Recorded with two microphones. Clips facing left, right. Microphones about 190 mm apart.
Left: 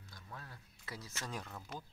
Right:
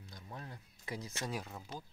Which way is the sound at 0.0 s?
20° right (ahead or behind).